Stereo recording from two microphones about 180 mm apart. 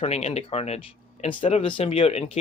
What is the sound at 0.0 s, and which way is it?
Speech, 35° left (ahead or behind).